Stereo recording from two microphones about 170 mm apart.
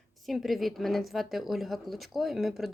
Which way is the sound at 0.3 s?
Centre (ahead or behind).